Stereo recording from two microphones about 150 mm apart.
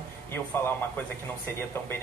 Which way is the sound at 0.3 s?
15° left (ahead or behind).